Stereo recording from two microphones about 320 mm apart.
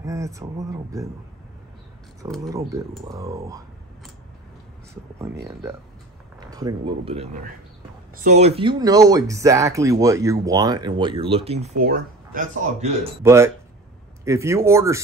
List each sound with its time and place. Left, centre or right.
0.0 s speech: centre
2.2 s speech: centre
5.5 s speech: centre; by 12.9 s right
13.2 s speech: centre